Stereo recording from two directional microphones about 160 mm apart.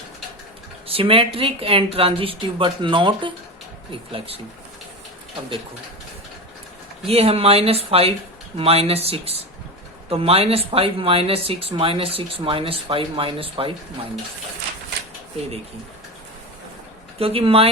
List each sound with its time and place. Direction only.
0.9 s speech: 35° right (ahead or behind)
7.0 s speech: 40° right (ahead or behind)
17.2 s speech: 35° right (ahead or behind)